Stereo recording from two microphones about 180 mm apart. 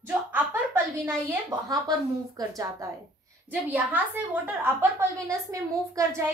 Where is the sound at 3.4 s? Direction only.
10° right (ahead or behind).